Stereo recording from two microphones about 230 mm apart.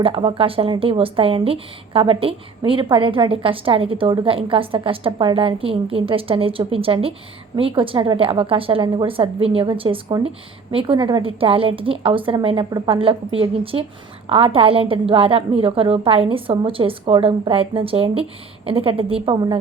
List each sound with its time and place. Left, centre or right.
0.0 s a woman's voice: right